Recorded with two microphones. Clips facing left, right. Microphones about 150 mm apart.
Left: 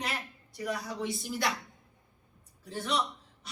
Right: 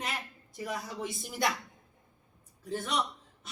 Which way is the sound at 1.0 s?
Centre (ahead or behind).